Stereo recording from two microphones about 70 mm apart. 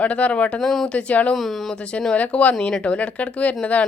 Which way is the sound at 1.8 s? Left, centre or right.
Centre.